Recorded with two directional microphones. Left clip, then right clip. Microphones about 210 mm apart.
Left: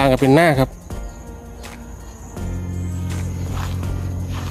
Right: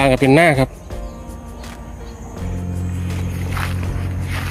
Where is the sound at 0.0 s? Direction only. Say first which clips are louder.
Right 1 dB; 10° left (ahead or behind).